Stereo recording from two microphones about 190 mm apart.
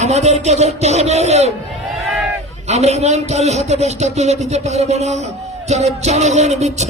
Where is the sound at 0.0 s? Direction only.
35° right (ahead or behind).